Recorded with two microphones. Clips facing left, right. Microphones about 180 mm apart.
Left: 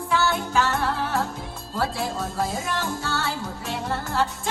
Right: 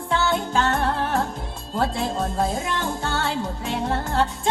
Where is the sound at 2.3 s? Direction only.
55° right (ahead or behind).